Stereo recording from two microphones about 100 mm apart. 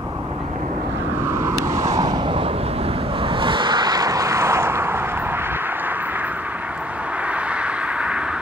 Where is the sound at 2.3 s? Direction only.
70° right (ahead or behind).